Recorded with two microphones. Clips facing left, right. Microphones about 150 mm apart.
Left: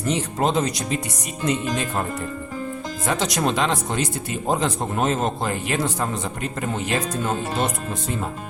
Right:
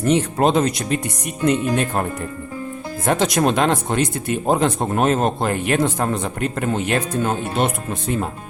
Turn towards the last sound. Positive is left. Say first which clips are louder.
# right 3 dB
turn(degrees=-60)  # may be behind; listen again after turning